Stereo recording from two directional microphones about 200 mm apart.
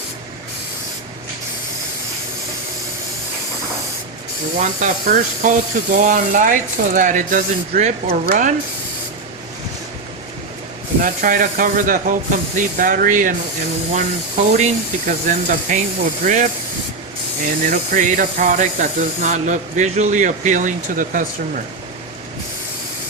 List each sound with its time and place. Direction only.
4.6 s speech: 40° right (ahead or behind)
11.0 s speech: 45° right (ahead or behind)
14.5 s speech: 35° right (ahead or behind)